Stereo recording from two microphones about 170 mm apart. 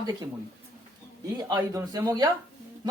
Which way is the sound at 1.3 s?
20° right (ahead or behind).